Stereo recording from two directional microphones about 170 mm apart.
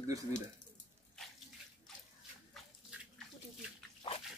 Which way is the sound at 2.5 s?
Centre (ahead or behind).